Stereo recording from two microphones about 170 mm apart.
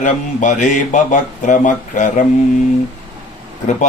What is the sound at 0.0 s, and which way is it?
Speech, 50° left (ahead or behind).